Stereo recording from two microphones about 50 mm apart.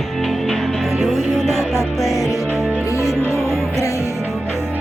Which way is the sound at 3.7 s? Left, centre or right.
Left.